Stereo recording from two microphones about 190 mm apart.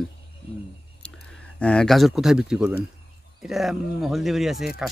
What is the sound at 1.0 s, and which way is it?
A man's voice, 5° left (ahead or behind).